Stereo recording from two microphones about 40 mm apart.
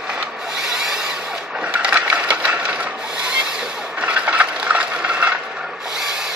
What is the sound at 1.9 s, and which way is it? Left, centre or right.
Wood, right.